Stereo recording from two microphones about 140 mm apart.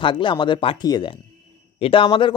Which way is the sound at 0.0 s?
35° left (ahead or behind).